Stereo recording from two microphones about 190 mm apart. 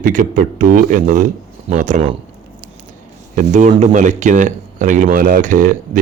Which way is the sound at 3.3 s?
40° right (ahead or behind).